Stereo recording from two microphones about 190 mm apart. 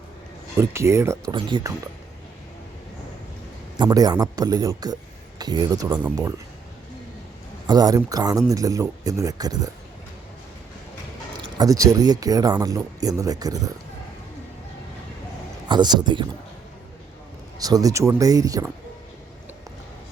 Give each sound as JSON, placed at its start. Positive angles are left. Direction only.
{"t": 0.6, "sound": "speech", "side_deg": -15}
{"t": 3.8, "sound": "speech", "side_deg": -20}
{"t": 7.7, "sound": "speech", "side_deg": -20}
{"t": 11.5, "sound": "speech", "side_deg": -20}
{"t": 15.7, "sound": "speech", "side_deg": -25}
{"t": 17.6, "sound": "speech", "side_deg": -20}